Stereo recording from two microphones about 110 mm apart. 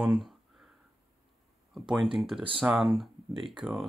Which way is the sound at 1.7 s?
5° right (ahead or behind).